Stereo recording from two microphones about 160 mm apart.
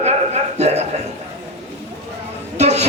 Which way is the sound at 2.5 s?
45° right (ahead or behind).